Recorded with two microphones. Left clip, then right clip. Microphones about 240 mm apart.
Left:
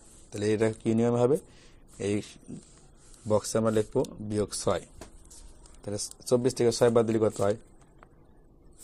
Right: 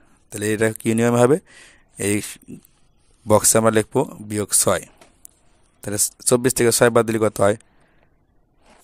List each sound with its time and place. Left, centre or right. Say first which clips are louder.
0.3 s speech: right 6 dB; right
3.3 s speech: right 11 dB; right